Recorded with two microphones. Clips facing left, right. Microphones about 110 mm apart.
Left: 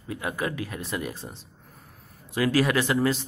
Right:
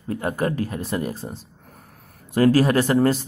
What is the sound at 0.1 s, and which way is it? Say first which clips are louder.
Speech: right 6 dB; 45° right (ahead or behind).